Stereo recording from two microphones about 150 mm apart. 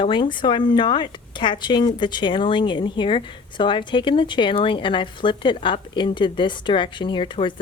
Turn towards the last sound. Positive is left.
turn(degrees=35)  # may be behind; listen again after turning